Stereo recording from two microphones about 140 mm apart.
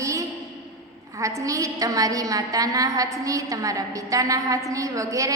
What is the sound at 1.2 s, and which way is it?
A woman's voice, 25° right (ahead or behind).